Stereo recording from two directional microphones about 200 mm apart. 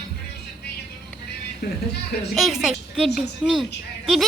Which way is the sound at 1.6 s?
50° left (ahead or behind).